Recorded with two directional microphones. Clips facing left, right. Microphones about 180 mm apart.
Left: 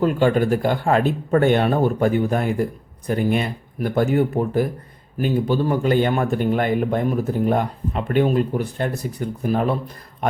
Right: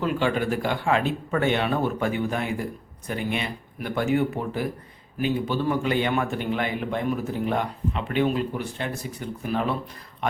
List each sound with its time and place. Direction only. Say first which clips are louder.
0.0 s speech: left 6 dB; 45° left (ahead or behind)